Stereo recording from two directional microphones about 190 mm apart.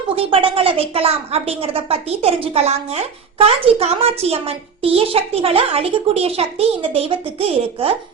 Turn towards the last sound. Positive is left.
turn(degrees=-30)  # may be behind; listen again after turning